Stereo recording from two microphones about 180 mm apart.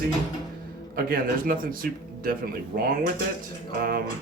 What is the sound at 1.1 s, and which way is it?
Speech, 50° right (ahead or behind).